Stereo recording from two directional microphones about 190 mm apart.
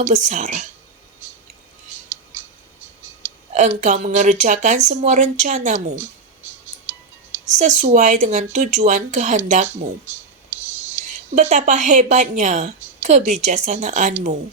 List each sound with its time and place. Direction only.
0.0 s a woman's voice: 40° right (ahead or behind)
3.5 s a woman's voice: 40° right (ahead or behind)
7.6 s a woman's voice: 40° right (ahead or behind)
11.3 s a woman's voice: 40° right (ahead or behind)